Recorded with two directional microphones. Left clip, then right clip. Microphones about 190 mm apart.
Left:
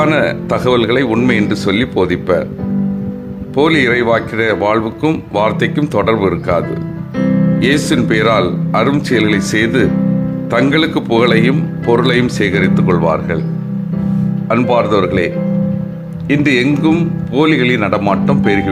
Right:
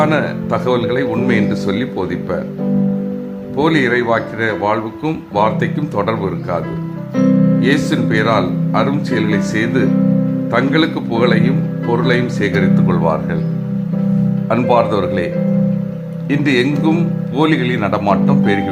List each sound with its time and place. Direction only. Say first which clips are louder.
0.0 s speech: left 3 dB; 25° left (ahead or behind)
3.6 s speech: left 3 dB; 25° left (ahead or behind)
7.2 s music: right 1 dB; 10° right (ahead or behind)
7.6 s speech: left 2 dB; 25° left (ahead or behind)
14.5 s speech: left 1 dB; 10° left (ahead or behind)
16.3 s speech: left 3 dB; 15° left (ahead or behind)